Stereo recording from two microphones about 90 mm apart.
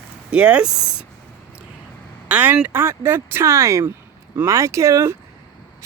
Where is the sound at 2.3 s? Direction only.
20° right (ahead or behind).